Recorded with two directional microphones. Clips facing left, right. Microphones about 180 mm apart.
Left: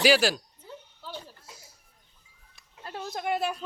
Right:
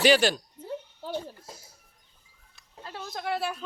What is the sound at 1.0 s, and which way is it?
Giggle, 45° right (ahead or behind).